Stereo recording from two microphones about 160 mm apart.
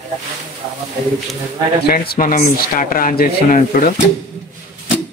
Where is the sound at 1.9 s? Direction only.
65° left (ahead or behind).